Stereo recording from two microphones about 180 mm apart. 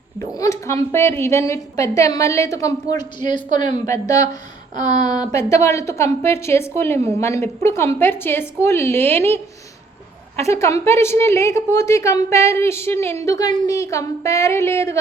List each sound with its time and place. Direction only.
0.2 s a woman's voice: 20° left (ahead or behind)
3.5 s a woman's voice: 45° right (ahead or behind)
3.8 s speech: 20° left (ahead or behind)
4.7 s speech: 40° right (ahead or behind)
4.9 s a woman's voice: 25° left (ahead or behind)
10.5 s a woman's voice: 15° left (ahead or behind)